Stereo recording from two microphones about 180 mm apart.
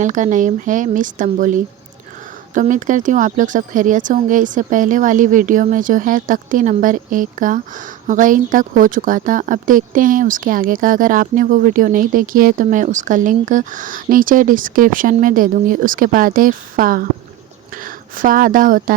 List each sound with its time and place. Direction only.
0.0 s a woman's voice: 45° right (ahead or behind)